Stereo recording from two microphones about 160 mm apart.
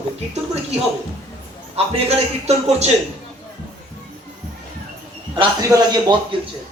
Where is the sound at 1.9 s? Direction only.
40° right (ahead or behind).